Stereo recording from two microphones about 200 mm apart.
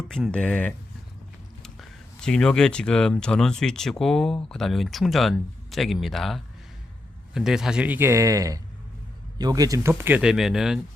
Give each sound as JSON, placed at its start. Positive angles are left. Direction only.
{"t": 0.1, "sound": "a man's voice", "side_deg": 5}